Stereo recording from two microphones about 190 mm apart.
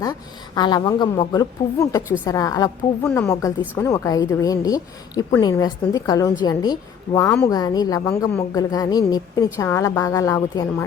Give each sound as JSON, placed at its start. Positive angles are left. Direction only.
{"t": 0.0, "sound": "a woman's voice", "side_deg": 20}